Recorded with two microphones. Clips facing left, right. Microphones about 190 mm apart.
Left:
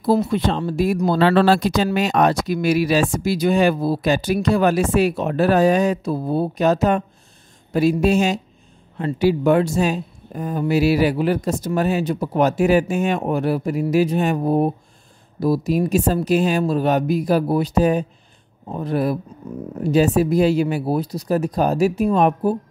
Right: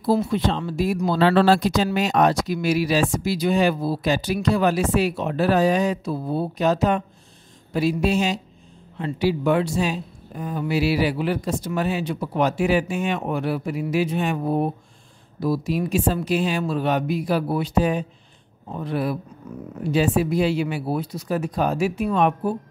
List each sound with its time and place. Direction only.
0.1 s speech: 55° left (ahead or behind)